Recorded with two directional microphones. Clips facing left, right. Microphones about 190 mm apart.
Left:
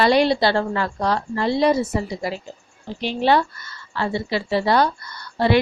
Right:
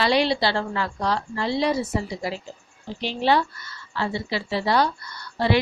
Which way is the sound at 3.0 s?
55° left (ahead or behind).